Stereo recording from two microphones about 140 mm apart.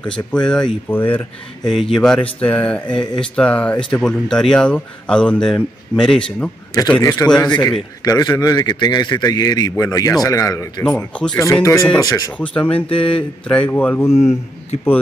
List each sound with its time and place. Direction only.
0.0 s speech: 5° left (ahead or behind)
1.6 s speech: centre (ahead or behind)
7.0 s a man's voice: 25° left (ahead or behind)
10.8 s speech: 10° left (ahead or behind)
11.6 s a man's voice: 25° left (ahead or behind)
12.4 s speech: 10° left (ahead or behind)
12.8 s speech: 40° left (ahead or behind)
13.1 s speech: 10° left (ahead or behind)